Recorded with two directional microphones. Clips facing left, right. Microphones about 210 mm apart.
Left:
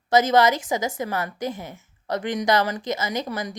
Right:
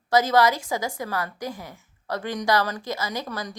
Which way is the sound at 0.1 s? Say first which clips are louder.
Left 2 dB; 20° left (ahead or behind).